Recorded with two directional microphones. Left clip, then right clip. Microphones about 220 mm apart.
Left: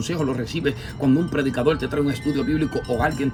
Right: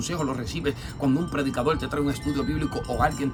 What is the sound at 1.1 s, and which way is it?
Speech, 25° right (ahead or behind).